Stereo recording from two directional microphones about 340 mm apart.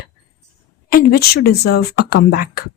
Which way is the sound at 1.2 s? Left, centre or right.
Left.